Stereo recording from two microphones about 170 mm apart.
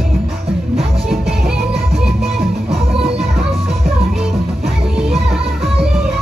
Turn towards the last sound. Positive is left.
turn(degrees=0)  # may be behind; listen again after turning